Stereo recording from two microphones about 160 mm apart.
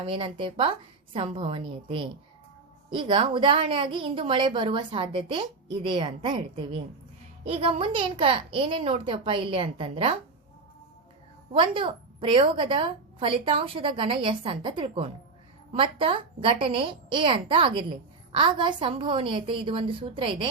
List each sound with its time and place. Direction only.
0.0 s a woman's voice: 35° right (ahead or behind)
11.5 s a woman's voice: 35° right (ahead or behind)